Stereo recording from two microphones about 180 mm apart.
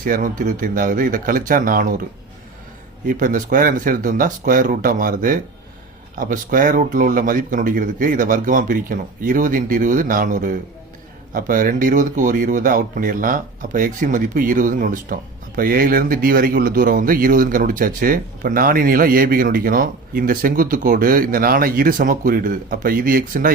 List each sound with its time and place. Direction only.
0.0 s speech: 50° right (ahead or behind)
3.1 s speech: 45° right (ahead or behind)